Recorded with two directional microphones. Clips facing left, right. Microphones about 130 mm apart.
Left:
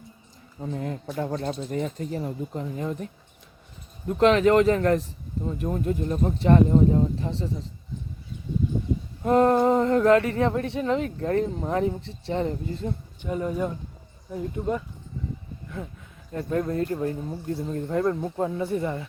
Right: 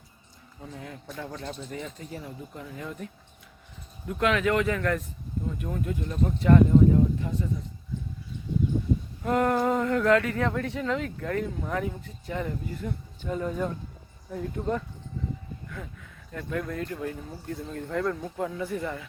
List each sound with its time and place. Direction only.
0.6 s a woman's voice: 40° left (ahead or behind)
4.1 s speech: 35° left (ahead or behind)
9.2 s a woman's voice: 25° left (ahead or behind)
13.2 s speech: 10° left (ahead or behind)
16.3 s a woman's voice: 35° left (ahead or behind)